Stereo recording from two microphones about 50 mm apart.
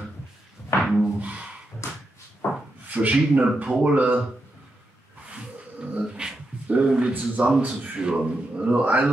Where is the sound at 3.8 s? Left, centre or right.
Right.